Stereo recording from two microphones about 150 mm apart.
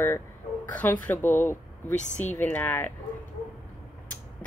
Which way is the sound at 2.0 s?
50° left (ahead or behind).